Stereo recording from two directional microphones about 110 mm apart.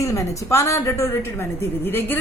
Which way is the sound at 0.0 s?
30° left (ahead or behind).